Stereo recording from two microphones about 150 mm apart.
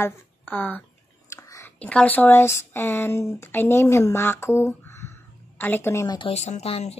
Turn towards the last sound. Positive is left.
turn(degrees=45)  # may be behind; listen again after turning